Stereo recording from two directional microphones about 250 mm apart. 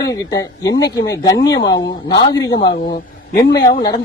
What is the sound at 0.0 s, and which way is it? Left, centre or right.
Speech, centre.